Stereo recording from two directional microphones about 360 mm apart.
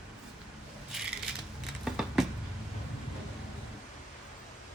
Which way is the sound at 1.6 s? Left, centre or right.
Centre.